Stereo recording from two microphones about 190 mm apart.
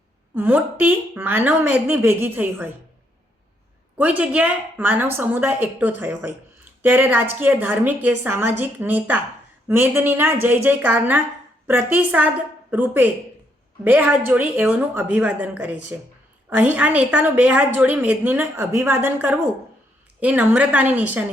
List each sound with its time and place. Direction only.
0.3 s a woman's voice: 10° right (ahead or behind)
3.9 s a woman's voice: 10° right (ahead or behind)